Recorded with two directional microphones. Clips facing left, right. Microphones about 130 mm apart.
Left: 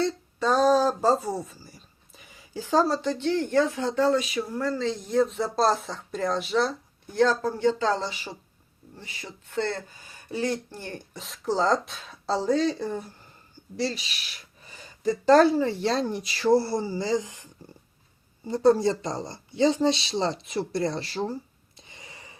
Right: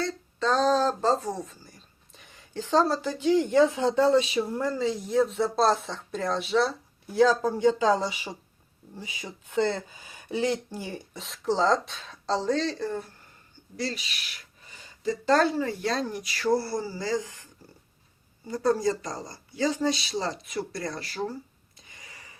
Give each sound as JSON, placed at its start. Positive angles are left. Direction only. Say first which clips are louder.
{"t": 0.0, "sound": "speech", "louder": "left 3 dB", "side_deg": 10}
{"t": 13.7, "sound": "speech", "louder": "left 3 dB", "side_deg": 30}
{"t": 15.0, "sound": "speech", "louder": "left 5 dB", "side_deg": 30}
{"t": 21.8, "sound": "gasp", "louder": "left 3 dB", "side_deg": 25}